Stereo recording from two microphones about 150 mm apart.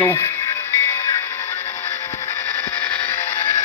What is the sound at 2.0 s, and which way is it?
Music, 15° left (ahead or behind).